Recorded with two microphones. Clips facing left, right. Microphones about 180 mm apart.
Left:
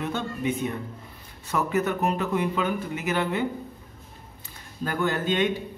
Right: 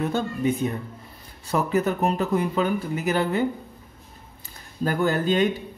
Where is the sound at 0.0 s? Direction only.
40° right (ahead or behind).